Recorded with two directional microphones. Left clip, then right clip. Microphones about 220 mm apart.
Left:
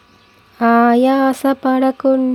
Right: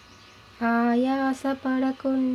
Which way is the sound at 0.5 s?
55° left (ahead or behind).